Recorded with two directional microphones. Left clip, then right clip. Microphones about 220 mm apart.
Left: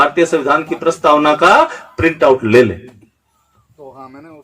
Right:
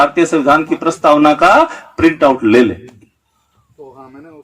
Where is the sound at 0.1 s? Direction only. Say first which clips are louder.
Right 2 dB; 30° right (ahead or behind).